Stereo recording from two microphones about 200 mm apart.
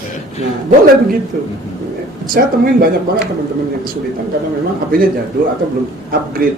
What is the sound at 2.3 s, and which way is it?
Speech, 50° right (ahead or behind).